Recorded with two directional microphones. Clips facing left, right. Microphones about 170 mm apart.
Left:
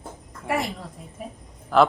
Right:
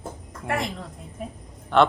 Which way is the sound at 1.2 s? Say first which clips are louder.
Right 2 dB; centre (ahead or behind).